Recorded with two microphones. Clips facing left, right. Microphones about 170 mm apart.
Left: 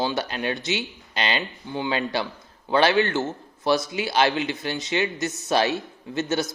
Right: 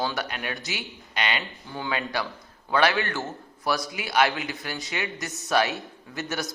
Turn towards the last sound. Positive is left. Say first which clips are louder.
# left 7 dB
turn(degrees=25)  # may be behind; listen again after turning